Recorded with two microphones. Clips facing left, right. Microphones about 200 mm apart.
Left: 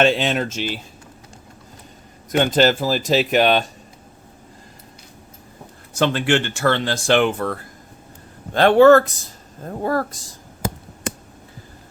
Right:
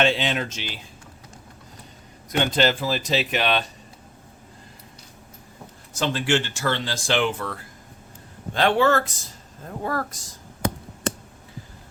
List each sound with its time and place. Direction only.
0.0 s speech: 45° left (ahead or behind)
2.3 s speech: 45° left (ahead or behind)
5.9 s speech: 60° left (ahead or behind)
9.6 s speech: 35° left (ahead or behind)